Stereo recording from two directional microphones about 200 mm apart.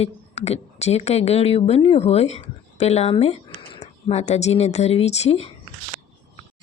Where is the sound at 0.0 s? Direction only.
30° left (ahead or behind).